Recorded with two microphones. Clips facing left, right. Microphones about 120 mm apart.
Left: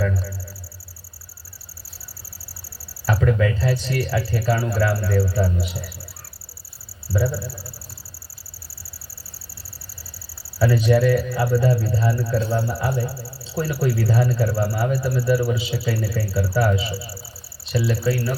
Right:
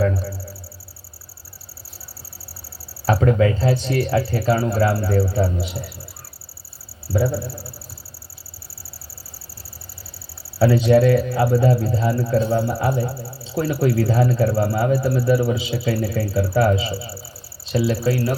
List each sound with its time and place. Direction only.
0.0 s a sound: 35° right (ahead or behind)
3.1 s speech: 30° right (ahead or behind)
7.1 s speech: 25° right (ahead or behind)
10.6 s speech: 20° right (ahead or behind)
12.3 s speech: 40° right (ahead or behind)
12.7 s speech: 25° right (ahead or behind)